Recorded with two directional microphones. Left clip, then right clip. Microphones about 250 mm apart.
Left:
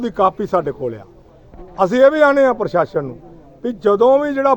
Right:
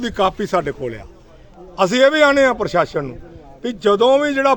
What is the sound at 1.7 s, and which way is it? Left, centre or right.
A man's voice, right.